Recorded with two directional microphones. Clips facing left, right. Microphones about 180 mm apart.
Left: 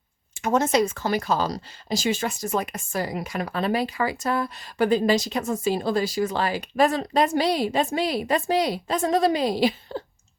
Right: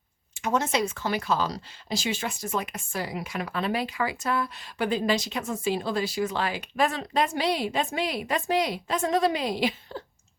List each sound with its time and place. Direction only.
0.3 s speech: 45° left (ahead or behind)